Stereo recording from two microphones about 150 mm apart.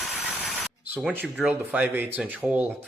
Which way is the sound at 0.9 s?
10° right (ahead or behind).